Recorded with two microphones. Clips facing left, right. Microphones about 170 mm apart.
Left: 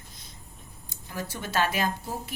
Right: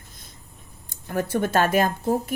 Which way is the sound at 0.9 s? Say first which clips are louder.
Right 11 dB; 55° right (ahead or behind).